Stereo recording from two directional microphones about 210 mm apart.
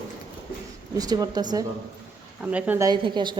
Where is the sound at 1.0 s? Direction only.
20° right (ahead or behind).